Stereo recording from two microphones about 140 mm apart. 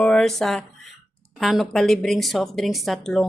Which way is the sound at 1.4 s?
Centre (ahead or behind).